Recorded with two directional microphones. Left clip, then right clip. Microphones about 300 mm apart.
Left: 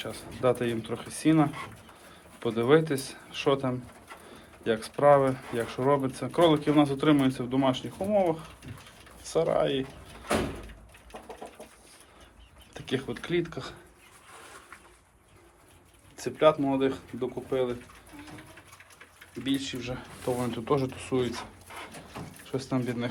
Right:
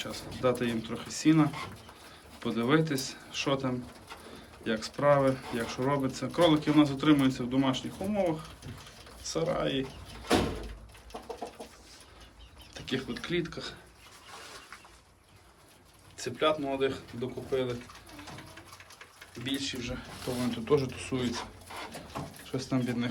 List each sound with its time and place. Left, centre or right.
0.0 s speech: centre
12.7 s speech: centre
16.1 s speech: centre
19.5 s speech: centre
22.4 s speech: centre